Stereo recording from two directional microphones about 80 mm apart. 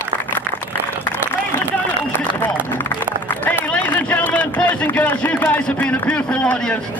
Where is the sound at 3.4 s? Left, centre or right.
Centre.